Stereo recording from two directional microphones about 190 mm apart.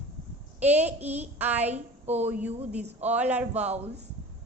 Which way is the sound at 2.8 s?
35° right (ahead or behind).